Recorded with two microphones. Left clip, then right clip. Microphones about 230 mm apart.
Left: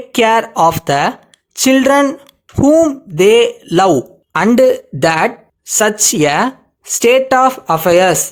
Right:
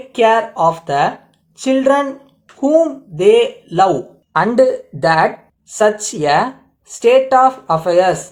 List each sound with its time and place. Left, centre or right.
0.1 s speech: left